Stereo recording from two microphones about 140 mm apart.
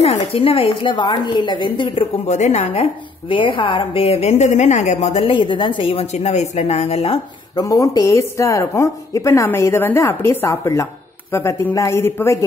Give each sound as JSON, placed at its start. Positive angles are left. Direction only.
{"t": 0.0, "sound": "a woman's voice", "side_deg": 45}
{"t": 2.2, "sound": "a woman's voice", "side_deg": 55}
{"t": 7.5, "sound": "speech", "side_deg": 25}